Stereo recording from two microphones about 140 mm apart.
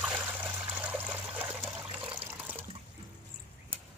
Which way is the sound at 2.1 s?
10° right (ahead or behind).